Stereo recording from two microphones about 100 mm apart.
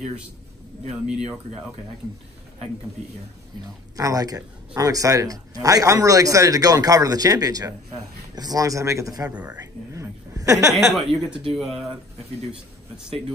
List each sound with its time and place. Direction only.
0.8 s speech: 5° right (ahead or behind)
3.9 s a man's voice: 40° right (ahead or behind)
9.3 s speech: 15° right (ahead or behind)
9.6 s a sound: 35° right (ahead or behind)
10.7 s a woman's voice: centre (ahead or behind)